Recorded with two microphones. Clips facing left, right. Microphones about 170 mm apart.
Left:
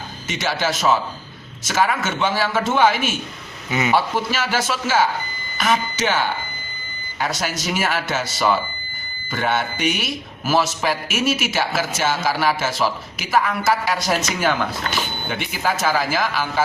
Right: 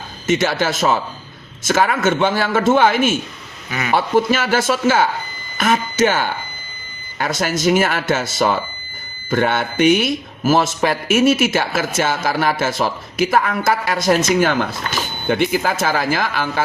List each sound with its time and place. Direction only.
0.3 s a man's voice: 50° right (ahead or behind)
3.7 s speech: 20° left (ahead or behind)
3.9 s a man's voice: 50° right (ahead or behind)